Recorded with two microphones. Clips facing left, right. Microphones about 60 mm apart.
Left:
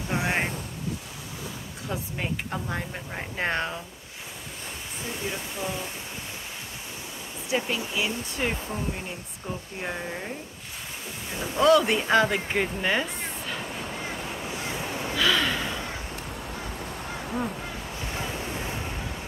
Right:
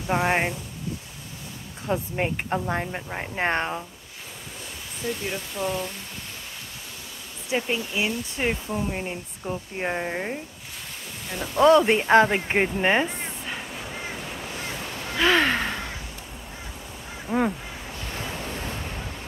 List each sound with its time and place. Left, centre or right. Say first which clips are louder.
0.1 s speech: right 5 dB; right
1.9 s speech: right 6 dB; right
2.9 s speech: right 3 dB; centre
5.3 s speech: right 4 dB; centre
7.4 s speech: right 2 dB; right
9.8 s speech: right 6 dB; right
11.5 s speech: right 3 dB; right
15.1 s a sound: right 4 dB; right
17.3 s speech: right 7 dB; right